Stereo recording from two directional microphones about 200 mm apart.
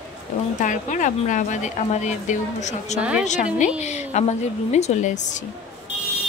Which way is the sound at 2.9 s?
5° right (ahead or behind).